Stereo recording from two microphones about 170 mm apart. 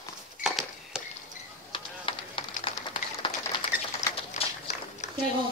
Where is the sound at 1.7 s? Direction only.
30° left (ahead or behind).